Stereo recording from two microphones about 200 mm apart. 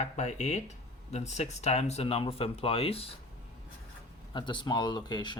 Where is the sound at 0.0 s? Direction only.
35° left (ahead or behind).